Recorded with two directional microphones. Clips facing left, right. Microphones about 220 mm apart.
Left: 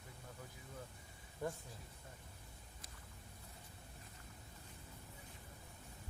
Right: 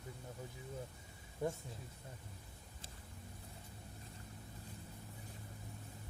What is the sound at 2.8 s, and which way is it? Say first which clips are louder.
Boat: right 5 dB; 30° right (ahead or behind).